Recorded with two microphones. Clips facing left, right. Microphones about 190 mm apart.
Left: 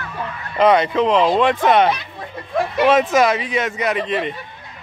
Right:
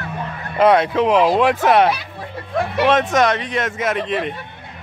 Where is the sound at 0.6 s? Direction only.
Centre (ahead or behind).